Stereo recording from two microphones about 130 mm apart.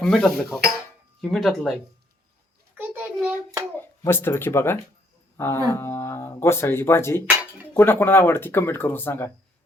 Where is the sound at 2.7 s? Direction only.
15° right (ahead or behind).